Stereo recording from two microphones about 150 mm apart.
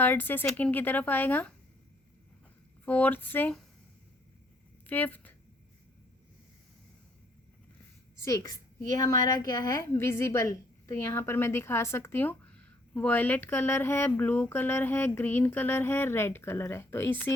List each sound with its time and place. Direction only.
0.0 s a woman's voice: 15° left (ahead or behind)
2.8 s a woman's voice: 10° left (ahead or behind)
4.9 s a woman's voice: 10° left (ahead or behind)
8.2 s a woman's voice: 20° left (ahead or behind)